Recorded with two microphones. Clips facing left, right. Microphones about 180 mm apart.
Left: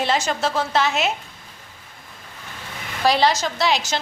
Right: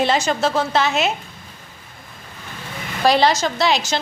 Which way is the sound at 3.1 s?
5° left (ahead or behind).